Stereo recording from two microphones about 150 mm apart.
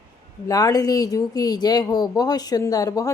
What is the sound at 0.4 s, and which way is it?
Speech, 25° left (ahead or behind).